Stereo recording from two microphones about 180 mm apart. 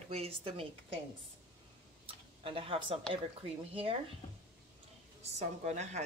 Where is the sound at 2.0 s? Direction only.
30° right (ahead or behind).